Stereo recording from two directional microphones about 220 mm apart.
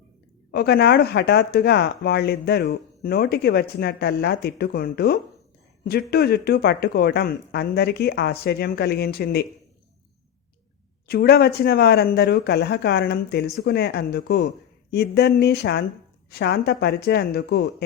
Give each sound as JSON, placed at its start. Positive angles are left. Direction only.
{"t": 0.5, "sound": "speech", "side_deg": 45}
{"t": 11.1, "sound": "speech", "side_deg": 45}